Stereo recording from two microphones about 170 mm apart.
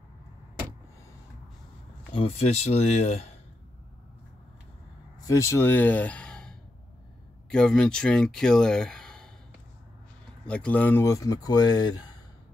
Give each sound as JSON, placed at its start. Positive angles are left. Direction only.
{"t": 2.1, "sound": "speech", "side_deg": 35}
{"t": 5.2, "sound": "speech", "side_deg": 20}
{"t": 7.5, "sound": "speech", "side_deg": 5}
{"t": 10.4, "sound": "speech", "side_deg": 5}